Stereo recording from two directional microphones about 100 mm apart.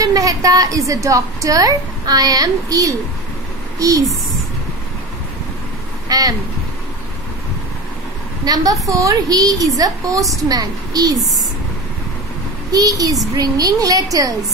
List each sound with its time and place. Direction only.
0.0 s a woman's voice: 35° right (ahead or behind)
6.0 s speech: 40° right (ahead or behind)
8.5 s a woman's voice: 40° right (ahead or behind)
12.7 s a woman's voice: 40° right (ahead or behind)